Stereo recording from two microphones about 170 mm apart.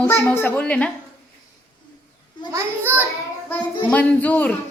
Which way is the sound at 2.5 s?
15° right (ahead or behind).